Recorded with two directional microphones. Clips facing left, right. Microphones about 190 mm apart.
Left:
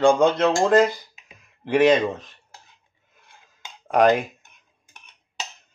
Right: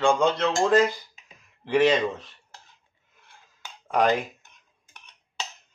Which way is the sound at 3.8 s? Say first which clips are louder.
Left 5 dB; 50° left (ahead or behind).